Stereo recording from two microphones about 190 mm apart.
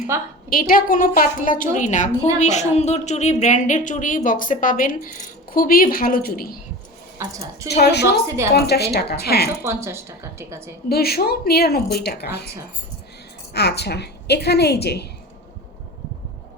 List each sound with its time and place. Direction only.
0.1 s a woman's voice: 15° right (ahead or behind)
0.5 s a woman's voice: 50° left (ahead or behind)
7.2 s a woman's voice: 15° right (ahead or behind)
7.7 s a woman's voice: 60° left (ahead or behind)
9.6 s a woman's voice: 15° right (ahead or behind)
10.8 s a woman's voice: 55° left (ahead or behind)
13.5 s a woman's voice: 60° left (ahead or behind)